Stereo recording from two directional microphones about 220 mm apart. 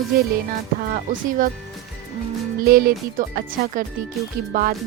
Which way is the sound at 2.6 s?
40° right (ahead or behind).